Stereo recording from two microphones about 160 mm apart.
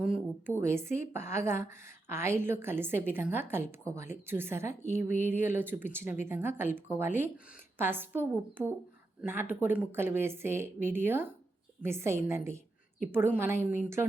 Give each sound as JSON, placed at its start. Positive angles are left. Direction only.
{"t": 0.6, "sound": "a woman's voice", "side_deg": -15}